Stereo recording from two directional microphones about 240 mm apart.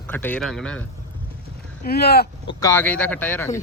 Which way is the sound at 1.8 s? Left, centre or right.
Left.